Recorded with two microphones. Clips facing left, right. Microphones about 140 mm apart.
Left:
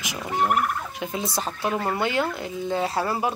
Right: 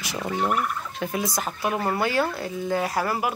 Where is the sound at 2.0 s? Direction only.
20° left (ahead or behind).